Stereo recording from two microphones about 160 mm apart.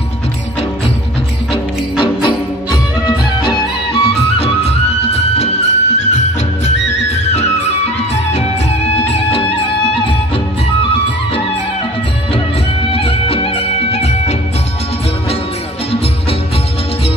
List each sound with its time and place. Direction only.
2.0 s music: 30° left (ahead or behind)
12.9 s music: 35° left (ahead or behind)